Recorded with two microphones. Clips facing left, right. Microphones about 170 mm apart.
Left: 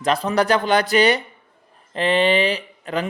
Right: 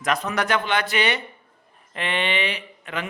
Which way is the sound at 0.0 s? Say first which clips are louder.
Left 5 dB; 30° left (ahead or behind).